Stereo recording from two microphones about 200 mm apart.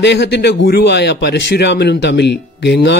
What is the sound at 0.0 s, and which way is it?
Speech, 60° left (ahead or behind).